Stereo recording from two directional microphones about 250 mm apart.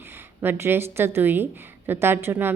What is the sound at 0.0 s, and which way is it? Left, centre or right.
A woman's voice, centre.